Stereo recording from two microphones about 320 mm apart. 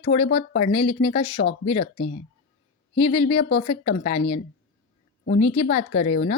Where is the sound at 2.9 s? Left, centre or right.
Centre.